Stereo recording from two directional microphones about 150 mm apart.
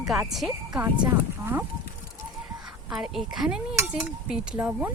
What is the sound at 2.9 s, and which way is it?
A woman's voice, centre (ahead or behind).